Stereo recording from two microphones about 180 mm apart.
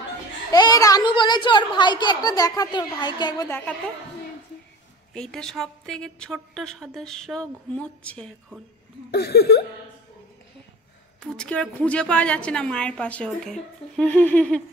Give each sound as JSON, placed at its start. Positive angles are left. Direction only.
{"t": 0.5, "sound": "a woman's voice", "side_deg": 20}
{"t": 3.4, "sound": "a woman's voice", "side_deg": 10}
{"t": 5.1, "sound": "a woman's voice", "side_deg": 5}
{"t": 9.1, "sound": "a sound", "side_deg": 65}
{"t": 11.1, "sound": "a woman's voice", "side_deg": 5}